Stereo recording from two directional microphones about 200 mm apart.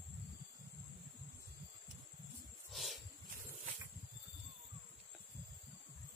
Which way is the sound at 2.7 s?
Centre (ahead or behind).